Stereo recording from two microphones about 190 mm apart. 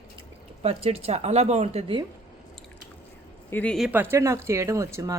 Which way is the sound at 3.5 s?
5° left (ahead or behind).